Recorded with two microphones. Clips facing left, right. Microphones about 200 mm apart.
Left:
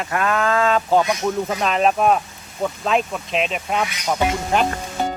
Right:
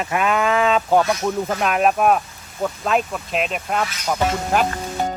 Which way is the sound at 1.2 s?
5° right (ahead or behind).